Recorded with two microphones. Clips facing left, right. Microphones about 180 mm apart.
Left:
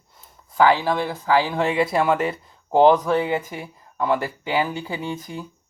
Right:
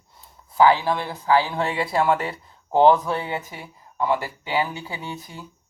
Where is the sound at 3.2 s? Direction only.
50° left (ahead or behind).